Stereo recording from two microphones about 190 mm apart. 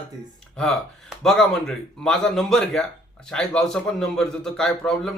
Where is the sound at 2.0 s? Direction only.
Centre (ahead or behind).